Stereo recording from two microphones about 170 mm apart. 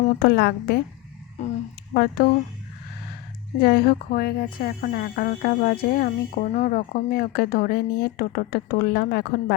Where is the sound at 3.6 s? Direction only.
70° left (ahead or behind).